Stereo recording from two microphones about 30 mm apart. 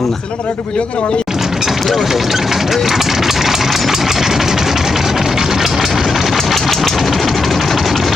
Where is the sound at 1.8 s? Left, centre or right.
Centre.